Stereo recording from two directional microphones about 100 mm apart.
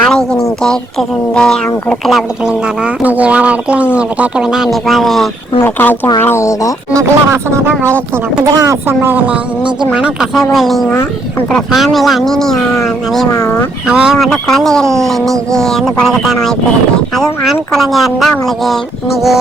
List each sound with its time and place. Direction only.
0.0 s a sound: 5° left (ahead or behind)
0.6 s speech: 5° left (ahead or behind)
5.5 s speech: 20° left (ahead or behind)
6.9 s speech: 30° right (ahead or behind)
8.4 s speech: 40° right (ahead or behind)
8.9 s speech: 25° right (ahead or behind); by 12.6 s 5° left (ahead or behind)
13.3 s speech: 35° left (ahead or behind)
13.8 s speech: 10° right (ahead or behind)
14.3 s speech: 5° left (ahead or behind)